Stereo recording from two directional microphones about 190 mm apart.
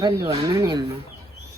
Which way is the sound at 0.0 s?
20° right (ahead or behind).